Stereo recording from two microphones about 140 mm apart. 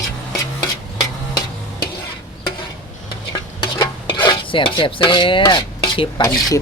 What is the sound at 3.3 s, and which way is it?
Stir, 25° left (ahead or behind).